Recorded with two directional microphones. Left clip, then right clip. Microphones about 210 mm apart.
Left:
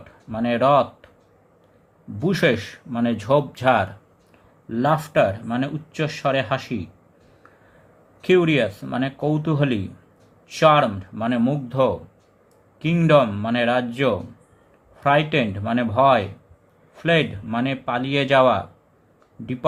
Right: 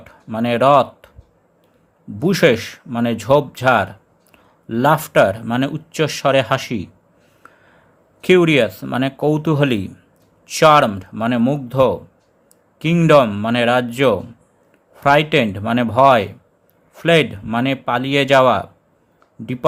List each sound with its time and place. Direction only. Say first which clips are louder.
0.0 s speech: right 4 dB; 30° right (ahead or behind)
2.1 s speech: right 6 dB; 30° right (ahead or behind)
7.4 s a sound: right 7 dB; 30° right (ahead or behind)
8.2 s speech: right 5 dB; 30° right (ahead or behind)